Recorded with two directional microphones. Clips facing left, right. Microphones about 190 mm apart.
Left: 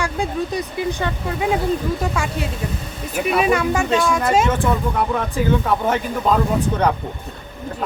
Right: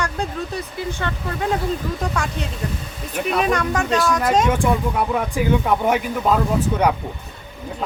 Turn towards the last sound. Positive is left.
turn(degrees=-5)  # may be behind; listen again after turning